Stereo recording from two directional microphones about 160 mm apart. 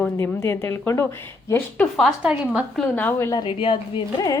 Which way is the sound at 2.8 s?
10° left (ahead or behind).